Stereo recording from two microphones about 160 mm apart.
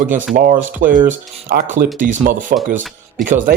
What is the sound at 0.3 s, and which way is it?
Speech, 55° right (ahead or behind).